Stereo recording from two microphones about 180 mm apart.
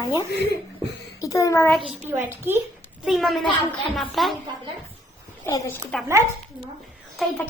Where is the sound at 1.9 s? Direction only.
10° right (ahead or behind).